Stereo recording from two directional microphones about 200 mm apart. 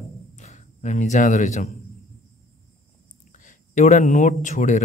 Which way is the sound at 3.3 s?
40° left (ahead or behind).